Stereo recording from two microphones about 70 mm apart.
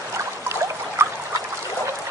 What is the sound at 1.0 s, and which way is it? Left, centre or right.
Trickle, right.